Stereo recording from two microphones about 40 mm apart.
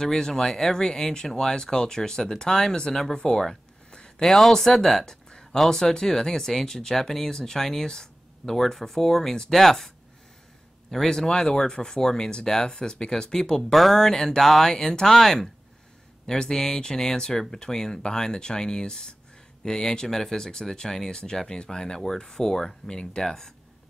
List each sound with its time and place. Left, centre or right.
0.0 s speech: centre
3.9 s a sound: centre
4.3 s speech: centre
5.3 s a sound: centre
5.6 s speech: centre
13.7 s speech: centre
13.9 s speech: centre